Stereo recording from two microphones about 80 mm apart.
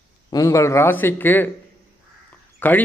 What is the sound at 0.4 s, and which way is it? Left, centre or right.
A man's voice, left.